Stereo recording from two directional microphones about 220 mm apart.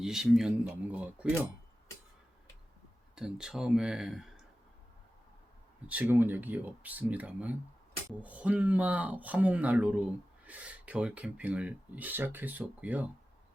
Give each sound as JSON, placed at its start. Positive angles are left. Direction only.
{"t": 0.0, "sound": "speech", "side_deg": 0}
{"t": 3.2, "sound": "speech", "side_deg": -5}
{"t": 5.9, "sound": "speech", "side_deg": -10}